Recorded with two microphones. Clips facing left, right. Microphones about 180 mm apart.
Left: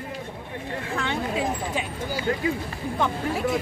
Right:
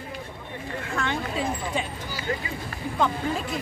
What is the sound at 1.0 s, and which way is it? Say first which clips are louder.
Speech: left 1 dB; 15° left (ahead or behind).